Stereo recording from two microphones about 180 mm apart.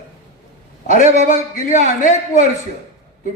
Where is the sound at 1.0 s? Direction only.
40° right (ahead or behind).